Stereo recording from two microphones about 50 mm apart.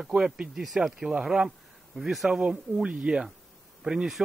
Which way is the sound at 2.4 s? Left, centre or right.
Centre.